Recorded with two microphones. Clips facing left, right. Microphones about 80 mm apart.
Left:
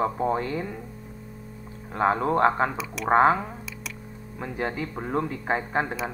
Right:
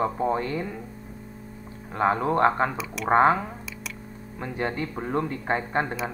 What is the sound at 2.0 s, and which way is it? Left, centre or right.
Speech, centre.